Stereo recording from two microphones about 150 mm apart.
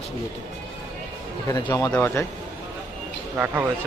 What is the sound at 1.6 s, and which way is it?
Speech, 20° left (ahead or behind).